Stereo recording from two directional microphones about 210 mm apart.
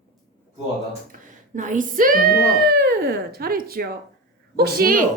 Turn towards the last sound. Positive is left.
turn(degrees=-45)  # may be behind; listen again after turning